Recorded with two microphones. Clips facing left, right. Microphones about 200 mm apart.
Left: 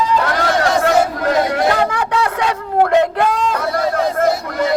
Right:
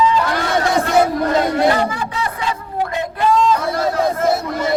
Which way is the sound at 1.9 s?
80° left.